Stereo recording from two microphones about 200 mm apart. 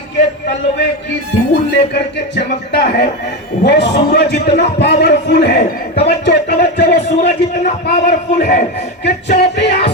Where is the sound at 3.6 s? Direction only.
60° left (ahead or behind).